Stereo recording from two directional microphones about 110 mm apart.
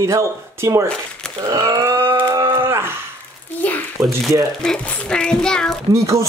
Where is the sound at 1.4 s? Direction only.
30° right (ahead or behind).